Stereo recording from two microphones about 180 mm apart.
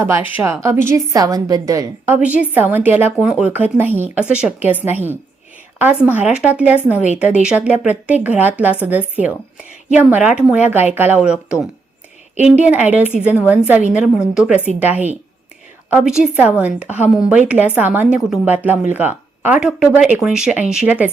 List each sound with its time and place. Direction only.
0.0 s a woman's voice: 10° right (ahead or behind)
2.1 s a woman's voice: 10° right (ahead or behind)